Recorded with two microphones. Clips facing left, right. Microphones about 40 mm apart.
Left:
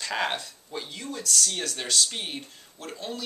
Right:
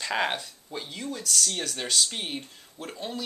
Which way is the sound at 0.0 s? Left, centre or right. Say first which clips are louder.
Right 1 dB; centre.